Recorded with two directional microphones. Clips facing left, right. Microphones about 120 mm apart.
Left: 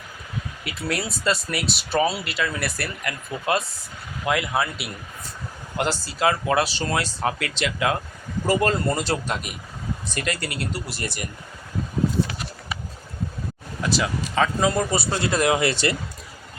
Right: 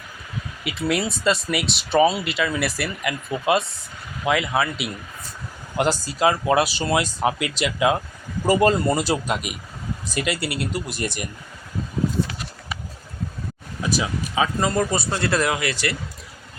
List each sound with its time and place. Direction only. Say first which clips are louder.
0.8 s speech: right 4 dB; centre (ahead or behind)
3.0 s speech: right 4 dB; 15° right (ahead or behind)
4.3 s speech: right 2 dB; centre (ahead or behind)
5.7 s speech: right 4 dB; 15° right (ahead or behind)
13.8 s speech: even; 10° right (ahead or behind)
15.4 s speech: left 3 dB; 25° left (ahead or behind)